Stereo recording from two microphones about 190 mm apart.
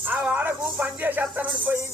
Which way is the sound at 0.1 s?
5° right (ahead or behind).